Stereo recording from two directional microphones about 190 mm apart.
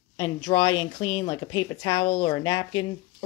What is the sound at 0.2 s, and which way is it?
A woman's voice, 25° left (ahead or behind).